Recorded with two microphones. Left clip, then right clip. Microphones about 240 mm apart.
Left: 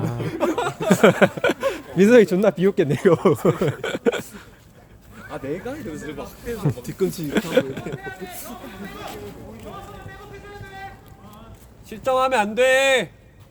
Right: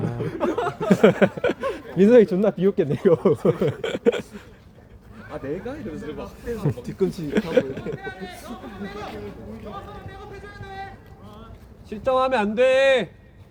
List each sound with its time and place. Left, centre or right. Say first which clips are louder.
0.2 s chuckle: left 2 dB; left
0.9 s speech: left 2 dB; centre
5.3 s speech: left 1 dB; left
7.3 s speech: even; centre
11.9 s speech: left 1 dB; left